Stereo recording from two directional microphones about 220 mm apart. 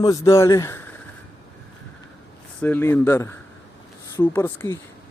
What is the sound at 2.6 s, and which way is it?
Speech, 10° left (ahead or behind).